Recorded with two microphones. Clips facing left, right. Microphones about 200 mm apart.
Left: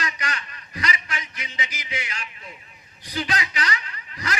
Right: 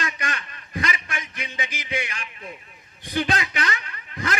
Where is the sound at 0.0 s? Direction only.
50° right (ahead or behind).